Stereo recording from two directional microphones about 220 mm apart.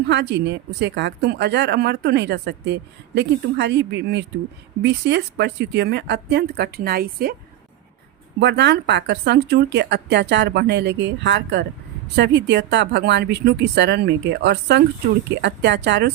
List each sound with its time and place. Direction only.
0.1 s speech: 50° right (ahead or behind)
8.4 s speech: 50° right (ahead or behind)